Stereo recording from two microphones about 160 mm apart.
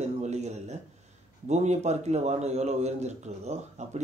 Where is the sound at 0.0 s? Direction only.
45° right (ahead or behind).